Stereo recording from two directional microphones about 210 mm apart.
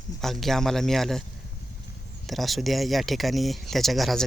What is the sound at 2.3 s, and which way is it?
Speech, centre (ahead or behind).